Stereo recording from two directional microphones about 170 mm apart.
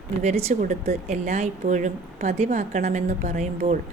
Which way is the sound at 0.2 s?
40° right (ahead or behind).